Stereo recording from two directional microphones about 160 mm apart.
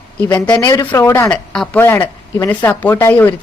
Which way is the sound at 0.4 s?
20° left (ahead or behind).